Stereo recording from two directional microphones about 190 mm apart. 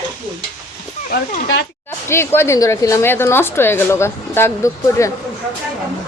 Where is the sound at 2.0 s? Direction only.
15° left (ahead or behind).